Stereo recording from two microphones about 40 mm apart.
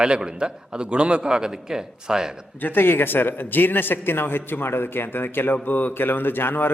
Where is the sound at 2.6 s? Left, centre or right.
Left.